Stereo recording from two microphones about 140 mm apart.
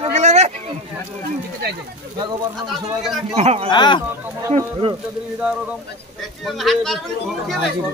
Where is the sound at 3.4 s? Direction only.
50° right (ahead or behind).